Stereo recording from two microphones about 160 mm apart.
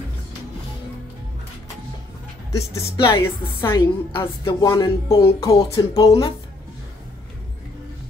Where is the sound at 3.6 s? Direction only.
25° left (ahead or behind).